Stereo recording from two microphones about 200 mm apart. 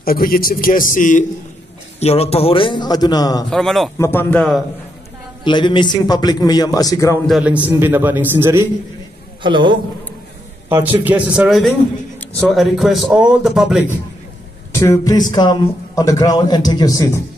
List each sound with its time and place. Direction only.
0.0 s a man's voice: 45° left (ahead or behind); by 3.4 s 20° left (ahead or behind)
3.4 s a man's voice: centre (ahead or behind)
5.4 s a man's voice: 25° left (ahead or behind)
7.2 s a man's voice: 5° right (ahead or behind)
9.4 s a man's voice: 25° right (ahead or behind)
10.7 s a man's voice: 10° right (ahead or behind)
14.7 s a man's voice: 15° left (ahead or behind)